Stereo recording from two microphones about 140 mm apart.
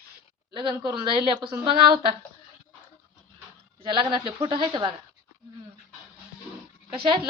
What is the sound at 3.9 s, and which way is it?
A woman's voice, 35° right (ahead or behind).